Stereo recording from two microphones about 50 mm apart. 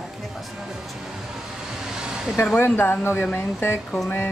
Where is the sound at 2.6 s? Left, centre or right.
Left.